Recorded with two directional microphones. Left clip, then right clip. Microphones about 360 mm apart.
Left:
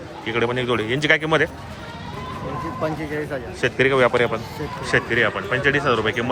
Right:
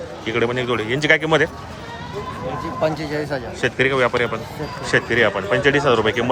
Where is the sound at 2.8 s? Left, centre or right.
Right.